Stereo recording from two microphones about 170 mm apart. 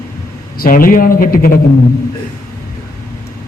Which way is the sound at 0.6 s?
55° left (ahead or behind).